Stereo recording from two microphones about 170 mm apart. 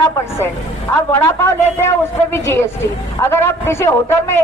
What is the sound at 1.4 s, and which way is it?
A woman's voice, 15° left (ahead or behind).